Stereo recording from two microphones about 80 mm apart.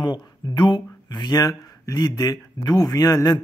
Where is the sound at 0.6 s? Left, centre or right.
Left.